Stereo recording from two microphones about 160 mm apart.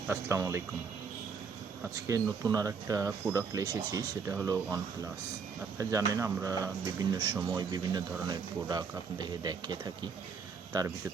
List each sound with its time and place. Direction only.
0.1 s speech: 15° right (ahead or behind)
2.0 s speech: 20° right (ahead or behind)